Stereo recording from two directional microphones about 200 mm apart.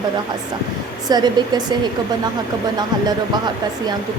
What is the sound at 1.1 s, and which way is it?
Speech, 20° right (ahead or behind).